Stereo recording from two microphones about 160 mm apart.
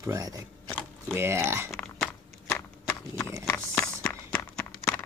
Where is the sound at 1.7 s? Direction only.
5° left (ahead or behind).